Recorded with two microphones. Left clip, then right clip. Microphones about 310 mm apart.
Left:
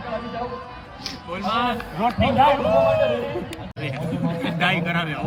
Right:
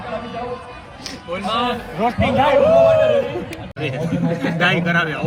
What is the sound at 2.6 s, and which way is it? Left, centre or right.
Speech, left.